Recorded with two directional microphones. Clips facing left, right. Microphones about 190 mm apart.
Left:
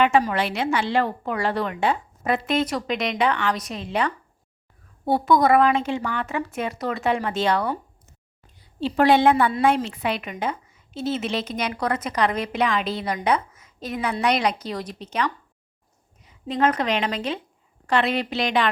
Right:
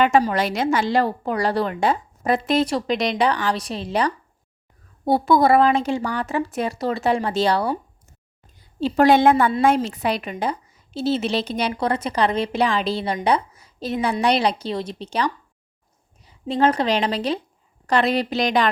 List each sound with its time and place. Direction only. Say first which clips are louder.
0.0 s a woman's voice: right 2 dB; 35° right (ahead or behind)
8.5 s a woman's voice: right 3 dB; 45° right (ahead or behind)